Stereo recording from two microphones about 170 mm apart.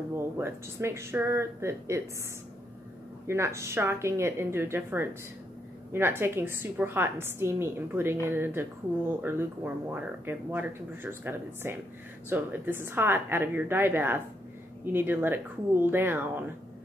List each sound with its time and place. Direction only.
0.1 s a woman's voice: 15° right (ahead or behind)
3.3 s a woman's voice: 15° right (ahead or behind)